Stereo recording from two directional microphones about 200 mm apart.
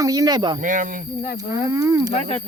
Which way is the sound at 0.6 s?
40° right (ahead or behind).